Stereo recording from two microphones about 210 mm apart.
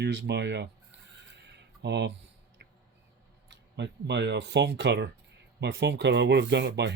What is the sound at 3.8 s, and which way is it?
Speech, 55° right (ahead or behind).